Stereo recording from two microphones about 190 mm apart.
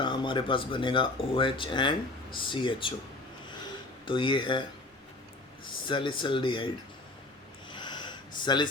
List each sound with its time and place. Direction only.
0.0 s speech: 25° left (ahead or behind)
4.0 s speech: 25° left (ahead or behind)
5.6 s speech: 25° left (ahead or behind)
7.7 s a sound: 25° left (ahead or behind)